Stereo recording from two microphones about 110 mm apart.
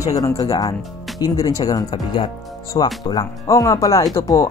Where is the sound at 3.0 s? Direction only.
35° left (ahead or behind).